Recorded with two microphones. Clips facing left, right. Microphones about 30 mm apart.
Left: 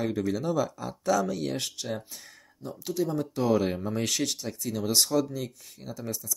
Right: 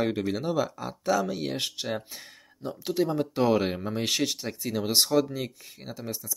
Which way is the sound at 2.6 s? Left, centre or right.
Right.